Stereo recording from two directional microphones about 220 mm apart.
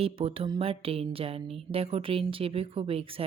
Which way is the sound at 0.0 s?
25° right (ahead or behind).